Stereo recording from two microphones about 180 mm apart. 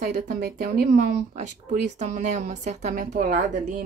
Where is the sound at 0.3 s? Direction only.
60° right (ahead or behind).